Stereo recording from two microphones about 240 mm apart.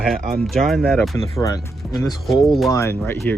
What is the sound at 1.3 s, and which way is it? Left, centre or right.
Speech, centre.